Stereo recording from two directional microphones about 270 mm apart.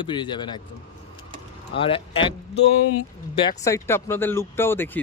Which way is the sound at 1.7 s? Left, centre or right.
Centre.